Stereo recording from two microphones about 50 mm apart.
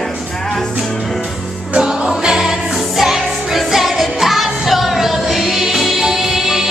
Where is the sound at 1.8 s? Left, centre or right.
Centre.